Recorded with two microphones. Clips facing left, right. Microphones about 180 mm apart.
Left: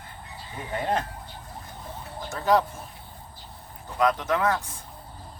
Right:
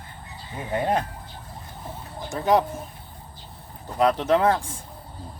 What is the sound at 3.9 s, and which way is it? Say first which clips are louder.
Speech: right 4 dB; 30° right (ahead or behind).